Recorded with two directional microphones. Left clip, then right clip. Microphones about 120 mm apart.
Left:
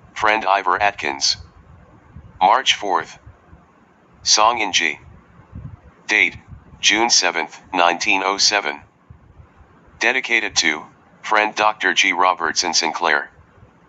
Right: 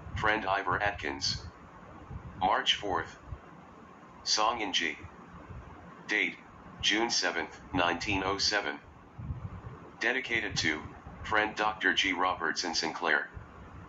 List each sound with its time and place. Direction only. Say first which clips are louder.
0.1 s speech: left 13 dB; 65° left (ahead or behind)
4.2 s speech: left 14 dB; 65° left (ahead or behind)
6.0 s speech: left 14 dB; 65° left (ahead or behind)
9.9 s speech: left 13 dB; 65° left (ahead or behind)